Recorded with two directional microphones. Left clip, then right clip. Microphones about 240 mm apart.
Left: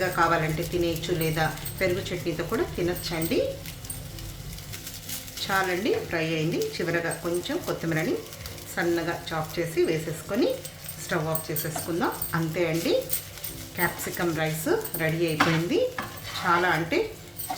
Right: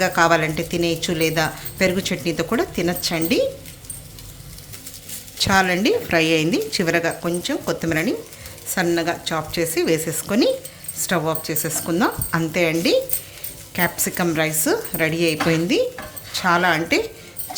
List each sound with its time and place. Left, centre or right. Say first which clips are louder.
0.0 s speech: right 7 dB; right
5.4 s speech: right 8 dB; right
16.5 s speech: right 6 dB; right